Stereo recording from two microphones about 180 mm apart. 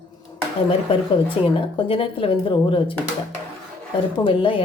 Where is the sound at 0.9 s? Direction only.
30° left (ahead or behind).